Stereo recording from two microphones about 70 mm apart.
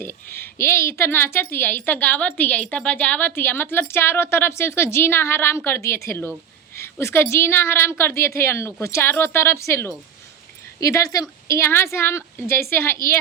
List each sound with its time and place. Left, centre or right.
0.0 s a woman's voice: left
10.8 s a woman's voice: left